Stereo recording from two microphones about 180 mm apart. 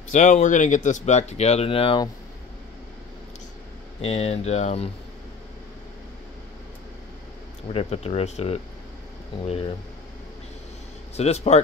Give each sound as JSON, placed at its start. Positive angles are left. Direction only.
{"t": 0.1, "sound": "speech", "side_deg": 45}
{"t": 4.0, "sound": "speech", "side_deg": 35}
{"t": 7.7, "sound": "speech", "side_deg": 35}
{"t": 11.1, "sound": "speech", "side_deg": 35}